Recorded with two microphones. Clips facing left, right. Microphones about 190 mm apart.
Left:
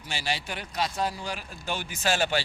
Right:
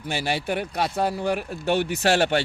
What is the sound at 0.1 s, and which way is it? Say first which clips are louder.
A man's voice: right 7 dB; 55° right (ahead or behind).